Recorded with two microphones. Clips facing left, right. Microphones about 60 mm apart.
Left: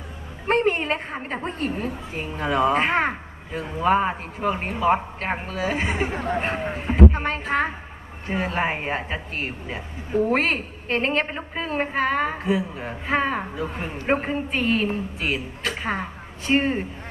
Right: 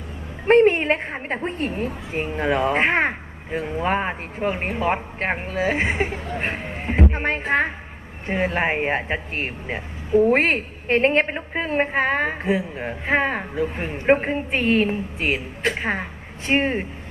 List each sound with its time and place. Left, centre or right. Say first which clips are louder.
0.5 s a woman's voice: right 6 dB; right
6.1 s speech: left 4 dB; left
6.4 s a woman's voice: left 1 dB; right